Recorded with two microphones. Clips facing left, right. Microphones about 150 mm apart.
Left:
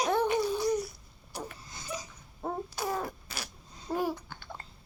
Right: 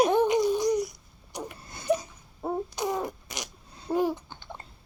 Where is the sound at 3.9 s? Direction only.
20° right (ahead or behind).